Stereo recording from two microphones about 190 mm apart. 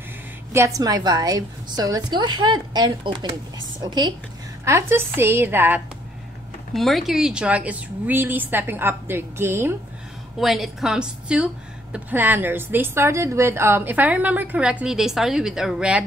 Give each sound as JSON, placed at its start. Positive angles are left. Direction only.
{"t": 0.7, "sound": "a woman's voice", "side_deg": -20}
{"t": 6.7, "sound": "a woman's voice", "side_deg": 0}
{"t": 10.4, "sound": "a woman's voice", "side_deg": 0}